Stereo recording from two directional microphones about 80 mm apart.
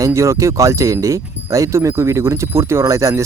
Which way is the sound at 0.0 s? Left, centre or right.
Right.